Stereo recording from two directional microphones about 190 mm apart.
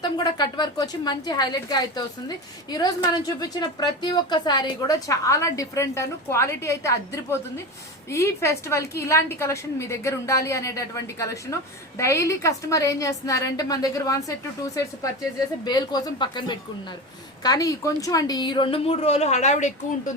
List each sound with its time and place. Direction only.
0.0 s a woman's voice: 20° left (ahead or behind)
15.6 s a woman's voice: 20° left (ahead or behind); by 20.1 s 40° left (ahead or behind)